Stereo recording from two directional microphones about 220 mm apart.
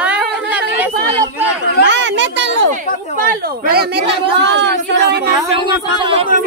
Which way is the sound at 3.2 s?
45° right (ahead or behind).